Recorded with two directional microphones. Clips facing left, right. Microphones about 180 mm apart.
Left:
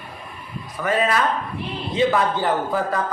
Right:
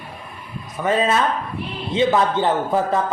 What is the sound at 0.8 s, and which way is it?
A man's voice, 25° right (ahead or behind).